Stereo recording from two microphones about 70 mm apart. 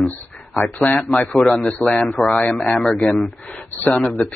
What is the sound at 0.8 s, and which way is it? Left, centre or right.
Speech, centre.